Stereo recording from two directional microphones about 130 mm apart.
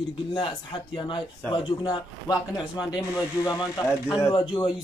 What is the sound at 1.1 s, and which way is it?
Speech, 35° left (ahead or behind).